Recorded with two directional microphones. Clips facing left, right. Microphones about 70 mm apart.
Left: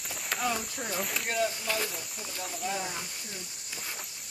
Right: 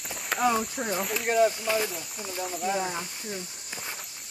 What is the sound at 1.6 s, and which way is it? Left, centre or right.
Speech, centre.